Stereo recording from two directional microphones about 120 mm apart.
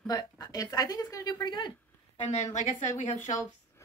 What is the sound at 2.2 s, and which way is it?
A woman's voice, 85° left.